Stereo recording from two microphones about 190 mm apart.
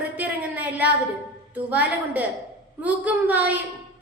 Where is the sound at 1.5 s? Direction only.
10° right (ahead or behind).